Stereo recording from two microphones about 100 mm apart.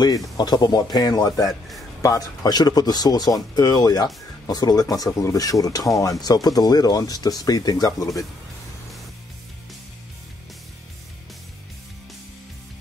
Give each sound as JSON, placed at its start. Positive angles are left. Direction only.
{"t": 0.4, "sound": "speech", "side_deg": 40}